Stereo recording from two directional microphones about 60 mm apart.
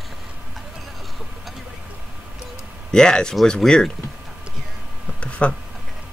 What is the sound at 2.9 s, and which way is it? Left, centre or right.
Speech, centre.